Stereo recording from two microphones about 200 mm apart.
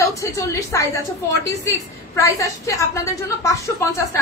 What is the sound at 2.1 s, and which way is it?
A woman's voice, 15° left (ahead or behind).